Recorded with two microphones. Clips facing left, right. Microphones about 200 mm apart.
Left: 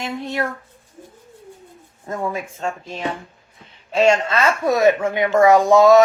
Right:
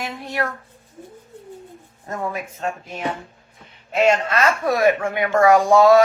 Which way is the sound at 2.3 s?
25° left (ahead or behind).